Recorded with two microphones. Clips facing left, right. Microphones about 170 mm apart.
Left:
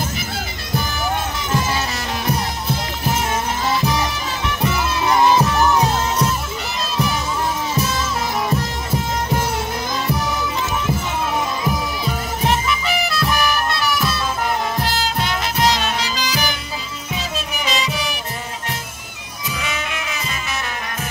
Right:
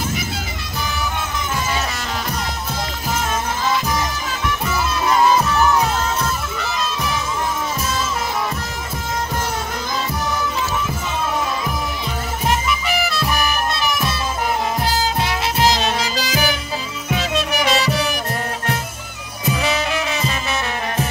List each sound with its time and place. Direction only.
13.7 s music: 20° right (ahead or behind)
15.7 s music: 40° right (ahead or behind)
17.1 s music: 70° right (ahead or behind)
19.6 s music: 35° right (ahead or behind)